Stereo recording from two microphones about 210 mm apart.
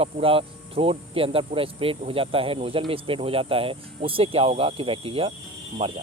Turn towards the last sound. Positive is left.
turn(degrees=-25)  # may be behind; listen again after turning